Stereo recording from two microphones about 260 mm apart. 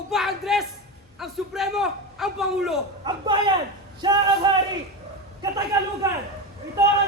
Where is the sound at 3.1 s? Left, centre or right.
Centre.